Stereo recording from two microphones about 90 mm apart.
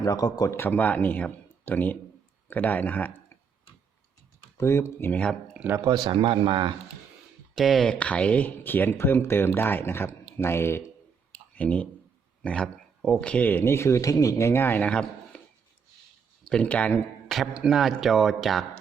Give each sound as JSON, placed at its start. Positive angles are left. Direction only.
{"t": 0.0, "sound": "speech", "side_deg": 45}
{"t": 0.5, "sound": "speech", "side_deg": 25}
{"t": 4.5, "sound": "speech", "side_deg": 30}
{"t": 5.8, "sound": "speech", "side_deg": -55}
{"t": 7.5, "sound": "speech", "side_deg": 0}
{"t": 11.5, "sound": "speech", "side_deg": 15}
{"t": 12.4, "sound": "a sound", "side_deg": 10}
{"t": 13.2, "sound": "speech", "side_deg": 15}
{"t": 13.7, "sound": "speech", "side_deg": 30}
{"t": 14.8, "sound": "speech", "side_deg": 10}
{"t": 16.4, "sound": "speech", "side_deg": 10}
{"t": 17.2, "sound": "a sound", "side_deg": 0}
{"t": 17.6, "sound": "speech", "side_deg": 0}